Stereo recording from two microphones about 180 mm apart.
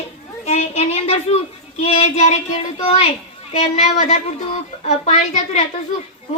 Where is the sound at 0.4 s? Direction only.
40° left (ahead or behind).